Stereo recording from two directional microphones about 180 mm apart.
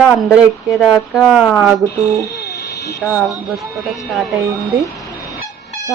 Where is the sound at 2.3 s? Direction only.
65° left (ahead or behind).